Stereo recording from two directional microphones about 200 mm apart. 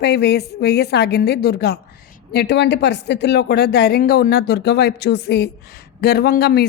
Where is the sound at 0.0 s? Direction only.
55° left (ahead or behind).